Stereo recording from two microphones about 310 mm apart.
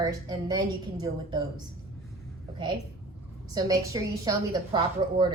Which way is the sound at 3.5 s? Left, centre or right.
Centre.